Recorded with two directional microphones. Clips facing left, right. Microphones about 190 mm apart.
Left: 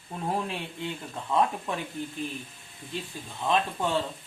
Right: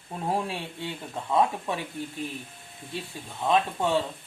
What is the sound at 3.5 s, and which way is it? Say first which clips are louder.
Speech: right 3 dB; 10° right (ahead or behind).